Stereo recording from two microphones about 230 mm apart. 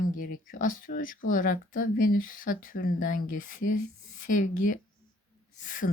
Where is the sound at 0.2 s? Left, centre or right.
Left.